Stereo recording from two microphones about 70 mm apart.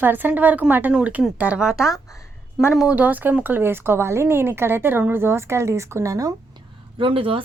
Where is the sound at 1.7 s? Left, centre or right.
Left.